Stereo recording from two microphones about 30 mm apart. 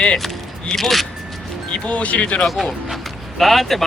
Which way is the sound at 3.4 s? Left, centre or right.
Centre.